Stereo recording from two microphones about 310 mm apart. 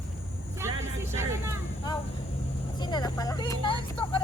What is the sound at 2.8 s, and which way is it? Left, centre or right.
Vehicle, centre.